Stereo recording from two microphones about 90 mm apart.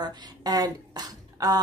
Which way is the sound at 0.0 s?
50° right (ahead or behind).